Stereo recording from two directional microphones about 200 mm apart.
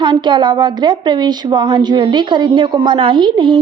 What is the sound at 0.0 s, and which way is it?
Speech, 25° right (ahead or behind).